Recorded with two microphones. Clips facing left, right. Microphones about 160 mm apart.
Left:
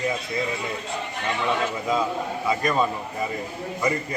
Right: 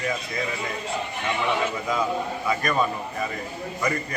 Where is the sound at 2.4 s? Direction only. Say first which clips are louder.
Left 3 dB; 25° left (ahead or behind).